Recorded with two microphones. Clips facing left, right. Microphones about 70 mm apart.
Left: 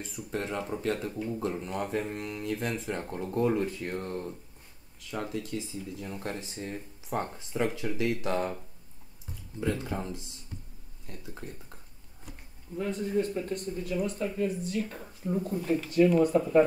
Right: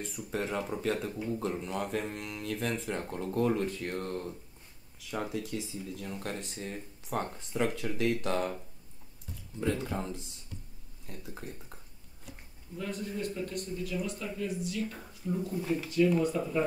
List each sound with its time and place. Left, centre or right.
0.0 s speech: centre
9.6 s speech: centre
12.7 s speech: left